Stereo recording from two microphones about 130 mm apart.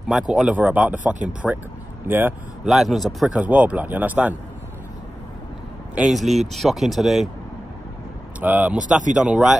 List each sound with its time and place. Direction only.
0.3 s speech: 10° right (ahead or behind)
2.6 s speech: centre (ahead or behind)
5.9 s speech: centre (ahead or behind)
8.4 s speech: 10° right (ahead or behind)